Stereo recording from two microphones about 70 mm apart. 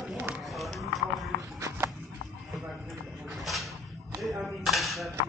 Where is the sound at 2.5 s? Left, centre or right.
Centre.